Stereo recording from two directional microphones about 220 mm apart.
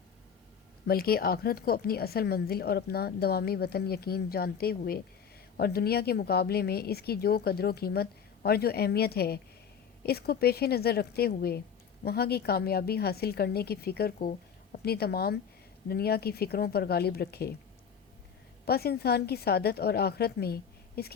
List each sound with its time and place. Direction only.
0.9 s a woman's voice: 45° left (ahead or behind)
18.6 s a woman's voice: 45° left (ahead or behind)